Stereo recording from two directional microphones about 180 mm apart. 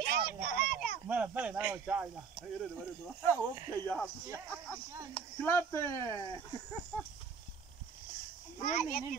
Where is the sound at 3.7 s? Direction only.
10° left (ahead or behind).